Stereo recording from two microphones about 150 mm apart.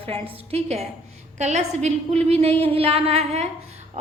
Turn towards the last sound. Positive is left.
turn(degrees=-45)  # may be behind; listen again after turning